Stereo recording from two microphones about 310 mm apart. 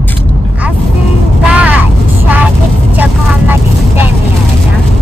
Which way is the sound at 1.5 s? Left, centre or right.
Centre.